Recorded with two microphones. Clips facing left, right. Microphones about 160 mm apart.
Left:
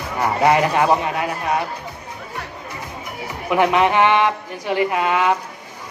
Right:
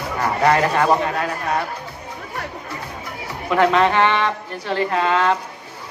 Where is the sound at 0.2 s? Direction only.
15° left (ahead or behind).